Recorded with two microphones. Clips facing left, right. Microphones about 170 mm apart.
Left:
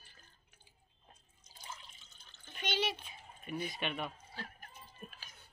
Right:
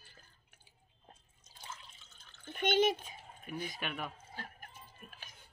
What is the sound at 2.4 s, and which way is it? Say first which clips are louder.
Speech: right 8 dB; 50° right (ahead or behind).